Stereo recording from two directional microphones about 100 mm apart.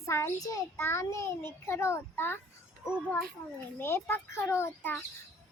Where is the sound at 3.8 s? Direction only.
20° left (ahead or behind).